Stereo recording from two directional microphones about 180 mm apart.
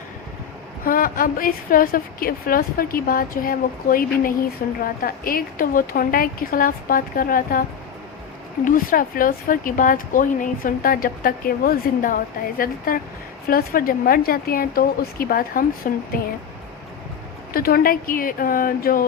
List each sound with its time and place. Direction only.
0.9 s speech: 50° left (ahead or behind)
8.6 s speech: 50° left (ahead or behind)
17.5 s speech: 55° left (ahead or behind)